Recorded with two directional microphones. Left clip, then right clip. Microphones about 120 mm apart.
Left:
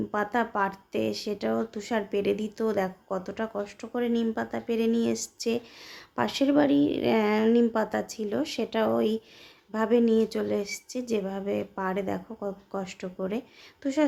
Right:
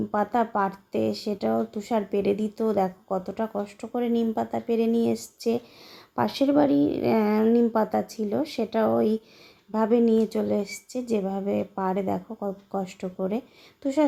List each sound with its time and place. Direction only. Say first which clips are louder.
0.1 s a woman's voice: right 4 dB; 30° right (ahead or behind)
12.4 s speech: right 3 dB; 10° right (ahead or behind)
12.8 s a woman's voice: right 2 dB; 30° right (ahead or behind)